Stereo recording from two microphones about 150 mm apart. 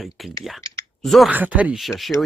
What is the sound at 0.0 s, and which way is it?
Speech, centre (ahead or behind).